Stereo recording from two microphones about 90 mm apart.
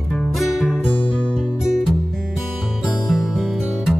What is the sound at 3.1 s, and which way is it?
Music, centre (ahead or behind).